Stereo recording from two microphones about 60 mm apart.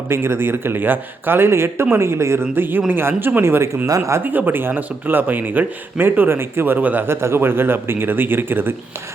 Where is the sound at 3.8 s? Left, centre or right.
Right.